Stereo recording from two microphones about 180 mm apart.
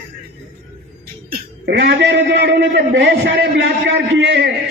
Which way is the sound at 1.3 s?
65° right (ahead or behind).